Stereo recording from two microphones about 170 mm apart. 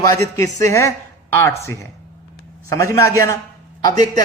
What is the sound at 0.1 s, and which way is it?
A man's voice, 20° left (ahead or behind).